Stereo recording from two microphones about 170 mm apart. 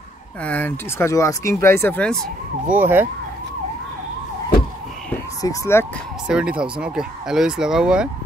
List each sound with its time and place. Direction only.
0.4 s speech: 10° left (ahead or behind)
2.7 s speech: 10° right (ahead or behind)
5.4 s speech: 15° left (ahead or behind)
6.2 s speech: 5° right (ahead or behind)